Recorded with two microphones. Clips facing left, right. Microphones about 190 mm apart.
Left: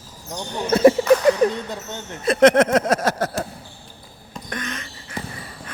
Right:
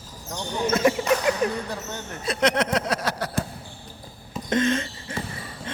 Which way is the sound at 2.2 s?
50° left (ahead or behind).